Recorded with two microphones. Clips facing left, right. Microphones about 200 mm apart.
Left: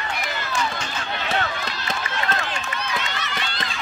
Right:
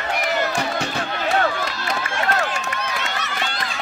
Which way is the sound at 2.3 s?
45° right (ahead or behind).